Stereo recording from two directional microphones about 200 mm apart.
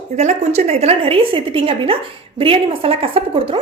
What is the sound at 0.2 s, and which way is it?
A woman's voice, 35° right (ahead or behind).